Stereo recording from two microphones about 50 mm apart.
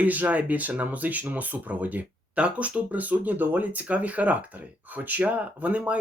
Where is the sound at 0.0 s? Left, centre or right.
Right.